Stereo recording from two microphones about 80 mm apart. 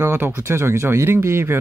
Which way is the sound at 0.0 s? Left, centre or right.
Right.